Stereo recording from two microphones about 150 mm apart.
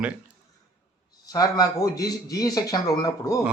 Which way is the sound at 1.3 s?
25° left (ahead or behind).